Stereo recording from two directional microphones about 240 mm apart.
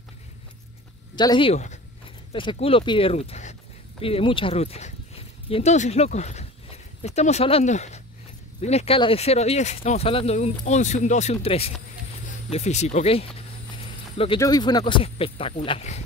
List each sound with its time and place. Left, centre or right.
1.1 s speech: centre